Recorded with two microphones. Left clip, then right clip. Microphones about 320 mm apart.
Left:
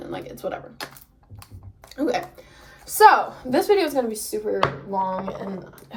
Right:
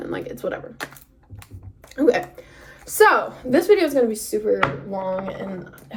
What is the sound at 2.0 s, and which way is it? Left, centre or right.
Speech, centre.